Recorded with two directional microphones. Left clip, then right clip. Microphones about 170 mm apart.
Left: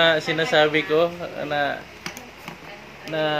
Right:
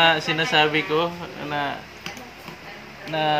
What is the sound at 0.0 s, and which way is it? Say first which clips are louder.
Mantra: even; 15° right (ahead or behind).